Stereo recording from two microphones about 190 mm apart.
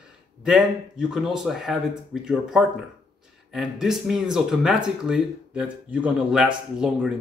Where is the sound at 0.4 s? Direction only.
Centre (ahead or behind).